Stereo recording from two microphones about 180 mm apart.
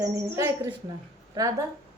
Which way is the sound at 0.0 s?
15° right (ahead or behind).